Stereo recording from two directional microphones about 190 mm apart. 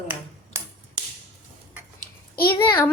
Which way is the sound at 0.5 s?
15° right (ahead or behind).